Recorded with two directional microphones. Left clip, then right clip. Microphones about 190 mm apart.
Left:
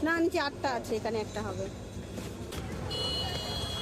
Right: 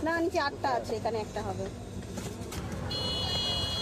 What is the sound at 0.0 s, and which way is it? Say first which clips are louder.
A woman's voice: even; 55° left (ahead or behind).